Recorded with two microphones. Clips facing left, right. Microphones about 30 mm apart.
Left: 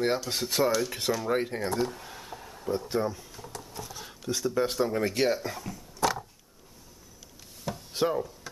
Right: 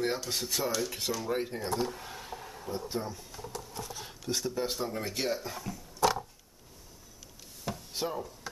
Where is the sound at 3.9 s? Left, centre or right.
Centre.